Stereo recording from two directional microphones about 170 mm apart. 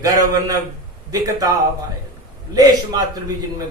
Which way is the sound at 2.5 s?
20° right (ahead or behind).